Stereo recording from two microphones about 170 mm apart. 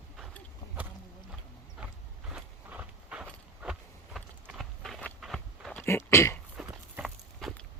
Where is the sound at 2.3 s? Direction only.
5° right (ahead or behind).